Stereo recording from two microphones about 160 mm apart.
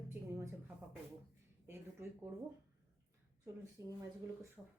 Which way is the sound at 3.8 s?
20° right (ahead or behind).